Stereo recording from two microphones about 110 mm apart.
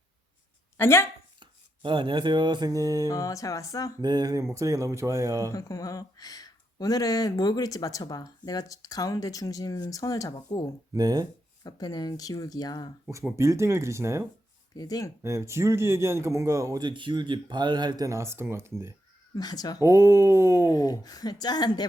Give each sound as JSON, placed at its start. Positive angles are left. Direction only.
{"t": 0.8, "sound": "speech", "side_deg": 25}
{"t": 1.4, "sound": "music", "side_deg": -45}
{"t": 3.1, "sound": "speech", "side_deg": 30}
{"t": 4.0, "sound": "speech", "side_deg": -40}
{"t": 5.5, "sound": "speech", "side_deg": 30}
{"t": 10.9, "sound": "speech", "side_deg": -35}
{"t": 11.6, "sound": "speech", "side_deg": 35}
{"t": 13.3, "sound": "a man's voice", "side_deg": -25}
{"t": 14.8, "sound": "speech", "side_deg": 35}
{"t": 15.2, "sound": "a man's voice", "side_deg": -25}
{"t": 16.8, "sound": "speech", "side_deg": -45}
{"t": 19.3, "sound": "speech", "side_deg": 35}
{"t": 19.8, "sound": "a man's voice", "side_deg": -25}
{"t": 20.7, "sound": "speech", "side_deg": 35}